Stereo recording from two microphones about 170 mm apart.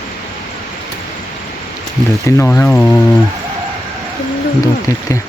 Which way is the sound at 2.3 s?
15° left (ahead or behind).